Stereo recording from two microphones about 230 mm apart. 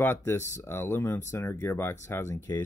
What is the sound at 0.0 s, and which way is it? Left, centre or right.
Speech, centre.